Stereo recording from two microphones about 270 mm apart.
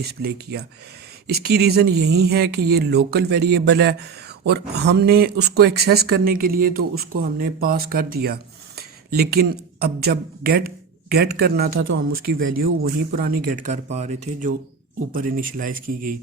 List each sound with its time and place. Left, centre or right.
0.0 s speech: right
12.5 s speech: right